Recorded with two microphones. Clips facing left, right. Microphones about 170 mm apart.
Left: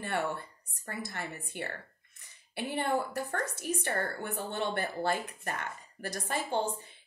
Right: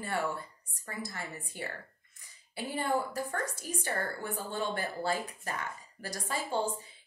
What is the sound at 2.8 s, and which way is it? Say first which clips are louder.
A woman's voice: even; 60° left (ahead or behind).